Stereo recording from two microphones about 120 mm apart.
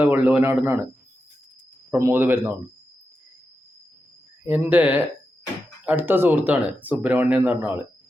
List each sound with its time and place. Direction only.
0.0 s speech: 15° right (ahead or behind)
1.9 s speech: 20° right (ahead or behind)
4.4 s speech: 15° right (ahead or behind)